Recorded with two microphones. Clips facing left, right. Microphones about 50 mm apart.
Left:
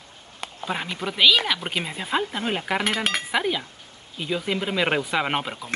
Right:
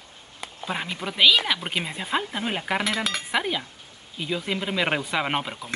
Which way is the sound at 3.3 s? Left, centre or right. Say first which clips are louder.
Left 2 dB; centre.